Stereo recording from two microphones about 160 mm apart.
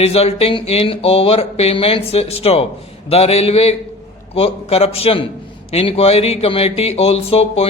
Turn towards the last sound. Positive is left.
turn(degrees=40)  # may be behind; listen again after turning